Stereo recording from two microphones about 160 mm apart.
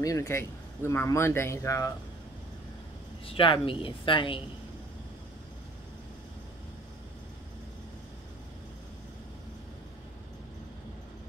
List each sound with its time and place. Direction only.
0.0 s speech: 20° left (ahead or behind)
3.3 s a woman's voice: 30° left (ahead or behind)